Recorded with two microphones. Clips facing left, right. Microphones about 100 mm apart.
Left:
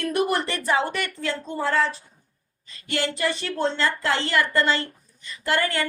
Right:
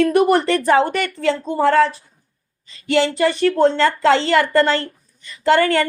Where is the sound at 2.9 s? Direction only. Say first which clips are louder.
Right 9 dB; 90° right; by 5.8 s 65° right (ahead or behind).